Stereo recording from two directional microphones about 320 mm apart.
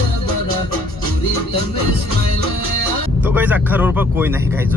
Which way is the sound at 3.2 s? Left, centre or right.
Centre.